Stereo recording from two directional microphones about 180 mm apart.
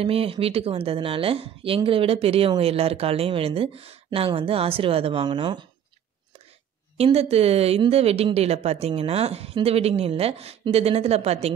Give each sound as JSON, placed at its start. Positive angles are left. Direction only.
{"t": 0.0, "sound": "a woman's voice", "side_deg": -30}
{"t": 7.0, "sound": "a woman's voice", "side_deg": -35}